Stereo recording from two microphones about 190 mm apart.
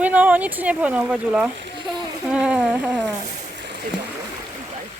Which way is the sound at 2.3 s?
5° right (ahead or behind).